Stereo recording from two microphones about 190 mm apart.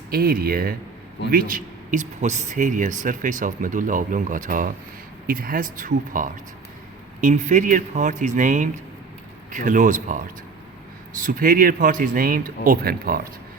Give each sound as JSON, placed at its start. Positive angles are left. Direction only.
{"t": 0.1, "sound": "speech", "side_deg": -50}